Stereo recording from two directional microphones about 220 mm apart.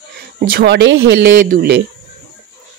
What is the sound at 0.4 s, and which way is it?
A woman's voice, 45° right (ahead or behind).